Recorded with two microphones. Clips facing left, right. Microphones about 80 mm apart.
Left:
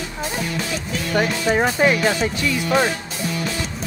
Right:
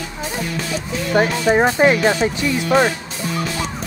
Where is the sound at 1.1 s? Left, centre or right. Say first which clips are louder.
Right 4 dB; right.